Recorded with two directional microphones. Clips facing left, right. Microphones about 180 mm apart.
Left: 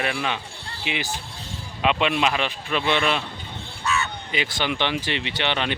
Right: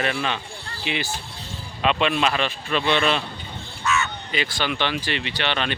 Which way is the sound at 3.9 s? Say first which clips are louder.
Right 2 dB; 35° left (ahead or behind).